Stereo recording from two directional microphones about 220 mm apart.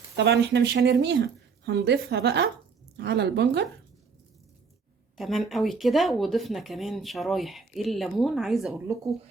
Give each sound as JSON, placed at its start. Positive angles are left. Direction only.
{"t": 0.2, "sound": "speech", "side_deg": -50}
{"t": 5.1, "sound": "speech", "side_deg": 0}